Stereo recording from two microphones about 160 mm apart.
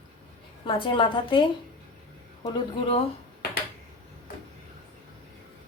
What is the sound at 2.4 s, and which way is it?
Speech, 35° left (ahead or behind).